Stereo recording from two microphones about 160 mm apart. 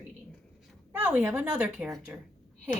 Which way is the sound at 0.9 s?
10° right (ahead or behind).